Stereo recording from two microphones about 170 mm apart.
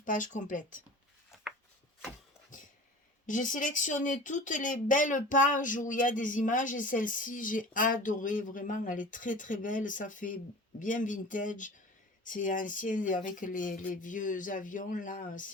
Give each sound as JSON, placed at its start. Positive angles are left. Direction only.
{"t": 0.0, "sound": "speech", "side_deg": 50}
{"t": 3.2, "sound": "speech", "side_deg": 50}